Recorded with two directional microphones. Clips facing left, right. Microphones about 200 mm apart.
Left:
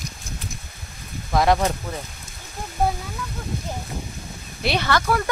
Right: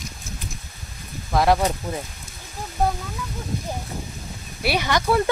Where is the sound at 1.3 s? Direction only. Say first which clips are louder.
Even; 5° right (ahead or behind).